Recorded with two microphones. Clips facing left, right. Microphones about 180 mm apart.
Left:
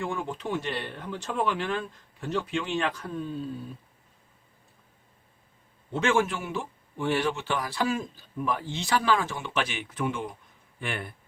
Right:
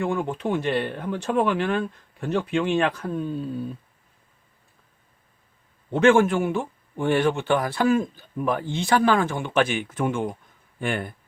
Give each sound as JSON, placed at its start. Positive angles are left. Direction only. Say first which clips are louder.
{"t": 0.0, "sound": "speech", "louder": "right 7 dB", "side_deg": -60}
{"t": 5.9, "sound": "speech", "louder": "right 8 dB", "side_deg": -55}